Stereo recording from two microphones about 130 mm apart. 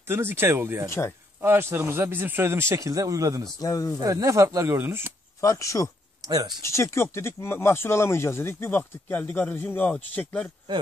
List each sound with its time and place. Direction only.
0.0 s a man's voice: 20° right (ahead or behind)
0.8 s speech: 20° left (ahead or behind)
1.4 s a man's voice: 20° right (ahead or behind)
3.5 s speech: 25° left (ahead or behind)
4.0 s a man's voice: 25° right (ahead or behind)
5.4 s speech: 25° left (ahead or behind)
6.2 s speech: 30° right (ahead or behind)
6.6 s speech: 20° left (ahead or behind)